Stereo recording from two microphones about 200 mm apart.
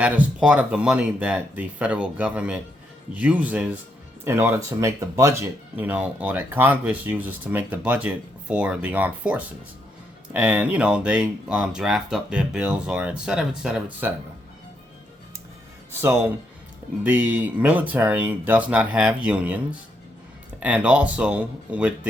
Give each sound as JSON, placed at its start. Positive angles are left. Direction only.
{"t": 0.0, "sound": "speech", "side_deg": -5}
{"t": 16.0, "sound": "speech", "side_deg": -10}